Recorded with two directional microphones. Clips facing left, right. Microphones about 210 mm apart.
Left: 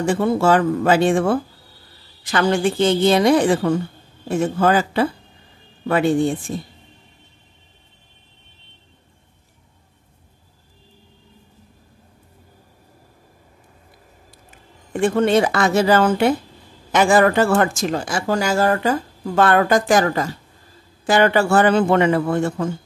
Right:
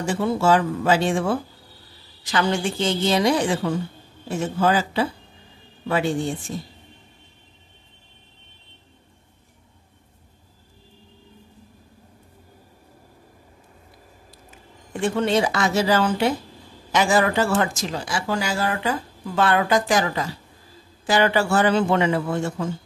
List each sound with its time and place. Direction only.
0.0 s a man's voice: 55° left (ahead or behind)
14.9 s a man's voice: 55° left (ahead or behind)